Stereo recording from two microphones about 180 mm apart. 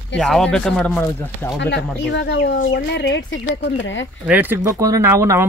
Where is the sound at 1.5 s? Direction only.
75° left (ahead or behind); by 4.0 s 90° left.